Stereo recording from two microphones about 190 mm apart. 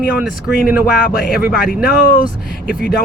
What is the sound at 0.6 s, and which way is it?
Speech, 5° right (ahead or behind).